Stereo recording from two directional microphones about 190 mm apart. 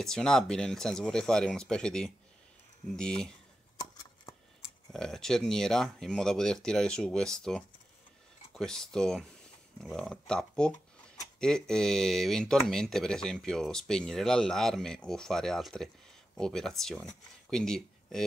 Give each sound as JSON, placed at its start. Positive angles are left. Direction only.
{"t": 0.0, "sound": "speech", "side_deg": 5}
{"t": 3.7, "sound": "a sound", "side_deg": 20}
{"t": 4.9, "sound": "speech", "side_deg": 5}